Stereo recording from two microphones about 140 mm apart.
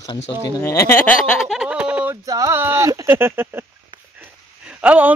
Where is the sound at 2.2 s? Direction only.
25° right (ahead or behind).